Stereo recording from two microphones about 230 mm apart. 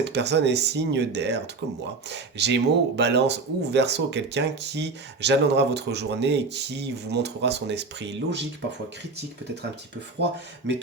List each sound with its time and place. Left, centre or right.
0.0 s speech: right
10.7 s speech: right